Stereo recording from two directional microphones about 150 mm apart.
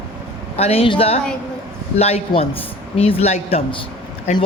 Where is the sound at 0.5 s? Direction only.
40° left (ahead or behind).